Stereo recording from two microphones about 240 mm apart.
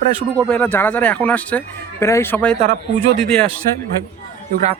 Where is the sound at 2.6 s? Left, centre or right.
Right.